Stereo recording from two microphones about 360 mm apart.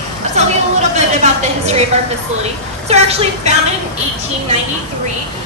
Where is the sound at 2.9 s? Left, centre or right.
Centre.